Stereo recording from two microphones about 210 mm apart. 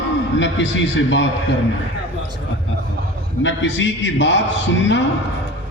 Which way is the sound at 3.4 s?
60° left (ahead or behind).